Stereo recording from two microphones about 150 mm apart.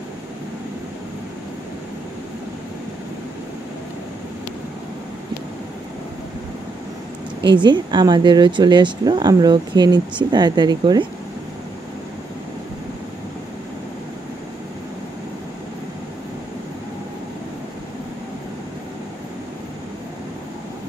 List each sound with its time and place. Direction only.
7.4 s speech: 30° right (ahead or behind)